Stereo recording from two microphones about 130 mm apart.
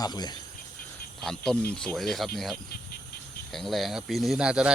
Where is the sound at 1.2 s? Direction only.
5° left (ahead or behind).